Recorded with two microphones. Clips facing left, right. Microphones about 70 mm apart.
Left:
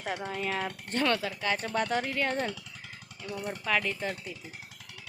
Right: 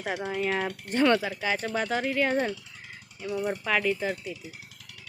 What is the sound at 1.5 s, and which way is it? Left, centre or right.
Speech, centre.